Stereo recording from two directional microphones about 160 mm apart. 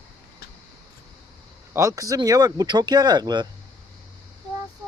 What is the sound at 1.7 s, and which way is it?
Speech, 20° right (ahead or behind).